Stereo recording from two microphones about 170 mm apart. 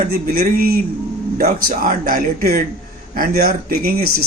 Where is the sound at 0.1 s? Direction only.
60° right (ahead or behind).